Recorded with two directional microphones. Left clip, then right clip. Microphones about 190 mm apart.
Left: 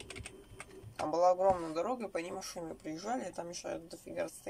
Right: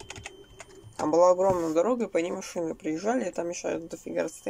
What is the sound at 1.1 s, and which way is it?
Speech, 40° right (ahead or behind).